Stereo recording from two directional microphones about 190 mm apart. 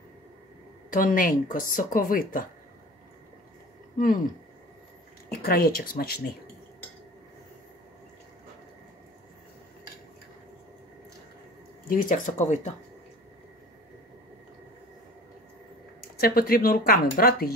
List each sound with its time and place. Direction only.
0.8 s speech: 45° left (ahead or behind)
5.4 s speech: 50° left (ahead or behind)
11.9 s speech: 45° left (ahead or behind)
16.2 s speech: 50° left (ahead or behind)